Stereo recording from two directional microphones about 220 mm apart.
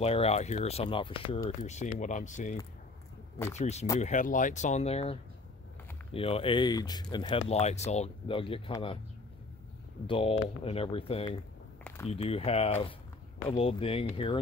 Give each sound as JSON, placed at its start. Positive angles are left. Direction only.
{"t": 0.0, "sound": "speech", "side_deg": 30}
{"t": 3.5, "sound": "speech", "side_deg": 30}
{"t": 10.0, "sound": "speech", "side_deg": 25}